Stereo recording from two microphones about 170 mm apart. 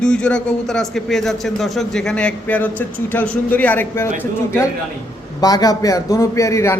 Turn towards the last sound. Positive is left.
turn(degrees=15)  # may be behind; listen again after turning